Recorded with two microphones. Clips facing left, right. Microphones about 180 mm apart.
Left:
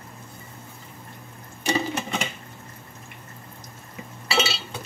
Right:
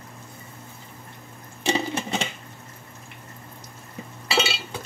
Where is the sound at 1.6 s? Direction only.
30° right (ahead or behind).